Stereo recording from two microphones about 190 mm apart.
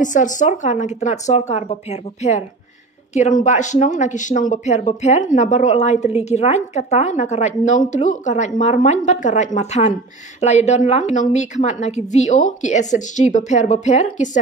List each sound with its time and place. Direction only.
0.0 s speech: 40° left (ahead or behind)
3.4 s speech: 40° left (ahead or behind)